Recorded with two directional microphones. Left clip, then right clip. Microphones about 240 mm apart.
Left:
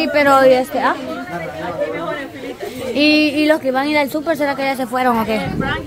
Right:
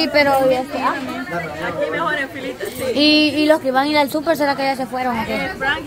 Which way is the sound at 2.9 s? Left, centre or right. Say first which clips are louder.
Left 1 dB; centre.